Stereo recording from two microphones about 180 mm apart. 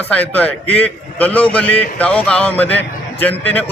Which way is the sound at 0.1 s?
10° left (ahead or behind).